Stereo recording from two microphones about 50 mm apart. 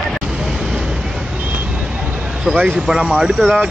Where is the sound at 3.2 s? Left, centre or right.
Centre.